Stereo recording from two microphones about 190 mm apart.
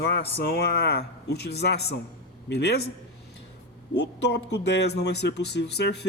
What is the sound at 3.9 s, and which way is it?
Speech, 65° left (ahead or behind).